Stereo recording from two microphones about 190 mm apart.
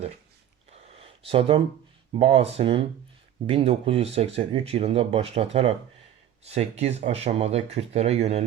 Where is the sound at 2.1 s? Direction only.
30° right (ahead or behind).